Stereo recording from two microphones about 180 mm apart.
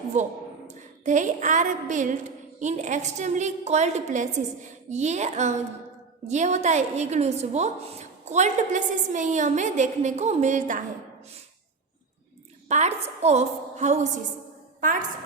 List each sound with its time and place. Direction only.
0.1 s a woman's voice: 40° right (ahead or behind)
12.6 s a woman's voice: 40° right (ahead or behind)